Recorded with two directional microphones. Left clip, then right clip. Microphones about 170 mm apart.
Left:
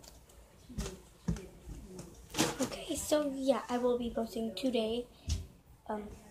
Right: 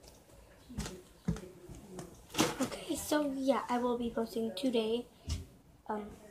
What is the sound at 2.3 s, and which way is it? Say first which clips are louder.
Speech: right 1 dB; centre (ahead or behind).